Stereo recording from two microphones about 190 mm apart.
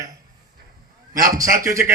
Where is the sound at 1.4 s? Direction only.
15° right (ahead or behind).